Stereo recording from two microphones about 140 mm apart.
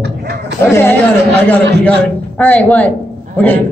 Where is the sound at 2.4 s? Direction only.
10° left (ahead or behind).